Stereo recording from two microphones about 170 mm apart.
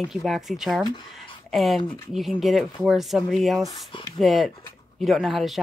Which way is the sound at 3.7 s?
30° left (ahead or behind).